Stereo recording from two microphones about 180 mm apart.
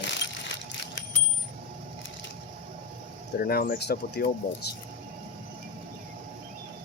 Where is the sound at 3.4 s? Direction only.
55° left (ahead or behind).